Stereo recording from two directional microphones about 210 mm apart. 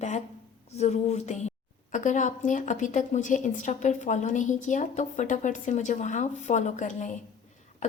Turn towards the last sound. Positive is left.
turn(degrees=35)  # may be behind; listen again after turning